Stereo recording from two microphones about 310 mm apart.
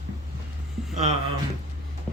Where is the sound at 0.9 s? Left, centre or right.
Right.